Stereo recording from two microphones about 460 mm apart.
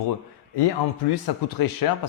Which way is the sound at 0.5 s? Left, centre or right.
Left.